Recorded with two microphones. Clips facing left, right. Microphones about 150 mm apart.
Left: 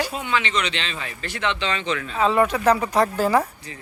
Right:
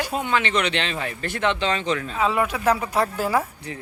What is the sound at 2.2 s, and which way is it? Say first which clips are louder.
Speech: left 5 dB; 5° right (ahead or behind).